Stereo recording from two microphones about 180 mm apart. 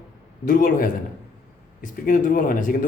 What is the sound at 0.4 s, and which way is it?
Speech, 50° left (ahead or behind).